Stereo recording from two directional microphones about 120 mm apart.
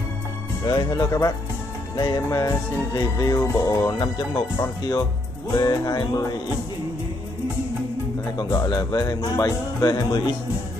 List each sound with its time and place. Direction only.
0.7 s speech: 35° left (ahead or behind)
2.0 s music: 30° left (ahead or behind)
5.6 s speech: 30° left (ahead or behind)
8.4 s speech: 30° left (ahead or behind)